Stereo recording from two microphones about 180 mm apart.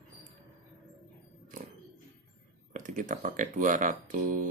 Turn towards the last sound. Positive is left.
turn(degrees=-50)  # may be behind; listen again after turning